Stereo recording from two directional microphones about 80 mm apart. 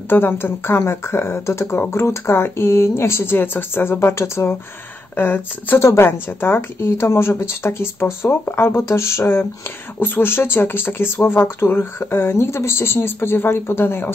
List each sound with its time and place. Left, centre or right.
0.1 s speech: left